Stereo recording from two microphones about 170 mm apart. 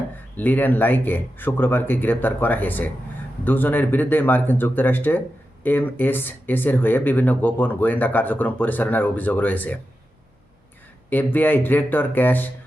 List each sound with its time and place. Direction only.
0.3 s speech: 10° left (ahead or behind)
11.1 s speech: 10° left (ahead or behind)